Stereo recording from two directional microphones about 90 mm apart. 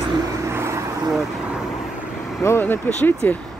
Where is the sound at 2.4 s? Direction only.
25° left (ahead or behind).